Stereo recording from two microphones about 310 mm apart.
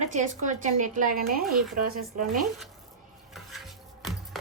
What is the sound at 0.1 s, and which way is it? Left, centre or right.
Speech, right.